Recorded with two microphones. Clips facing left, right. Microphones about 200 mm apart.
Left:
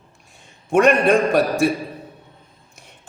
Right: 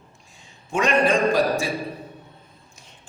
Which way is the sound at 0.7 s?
60° left (ahead or behind).